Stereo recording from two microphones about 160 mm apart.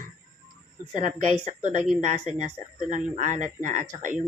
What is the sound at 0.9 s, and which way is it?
Speech, 50° right (ahead or behind).